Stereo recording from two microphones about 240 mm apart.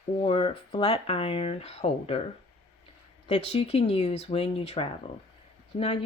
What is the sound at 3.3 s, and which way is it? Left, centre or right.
Speech, left.